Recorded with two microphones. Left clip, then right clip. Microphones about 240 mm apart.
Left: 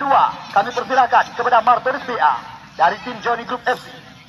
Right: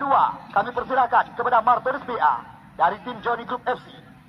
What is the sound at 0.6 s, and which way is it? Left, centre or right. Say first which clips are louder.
A man's voice: left 5 dB; left.